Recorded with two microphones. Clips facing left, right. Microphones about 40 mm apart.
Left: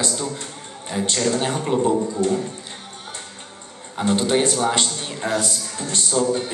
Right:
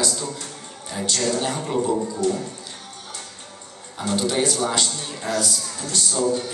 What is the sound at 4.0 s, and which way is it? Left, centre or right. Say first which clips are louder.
A man's voice: left 3 dB; left.